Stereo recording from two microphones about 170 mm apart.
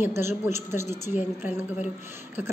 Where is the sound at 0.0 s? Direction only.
15° right (ahead or behind).